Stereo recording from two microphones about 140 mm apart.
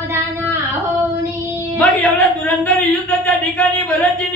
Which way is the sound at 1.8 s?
10° left (ahead or behind).